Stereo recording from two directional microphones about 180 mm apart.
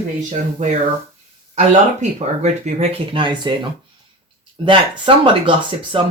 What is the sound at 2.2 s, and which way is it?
Speech, 40° right (ahead or behind).